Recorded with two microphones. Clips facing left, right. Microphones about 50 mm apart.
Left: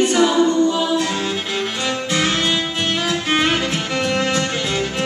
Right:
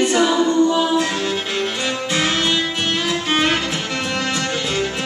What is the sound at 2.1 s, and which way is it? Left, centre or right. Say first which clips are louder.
Music: even; centre.